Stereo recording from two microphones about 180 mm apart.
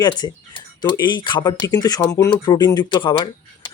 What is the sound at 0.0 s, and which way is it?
Speech, 25° left (ahead or behind).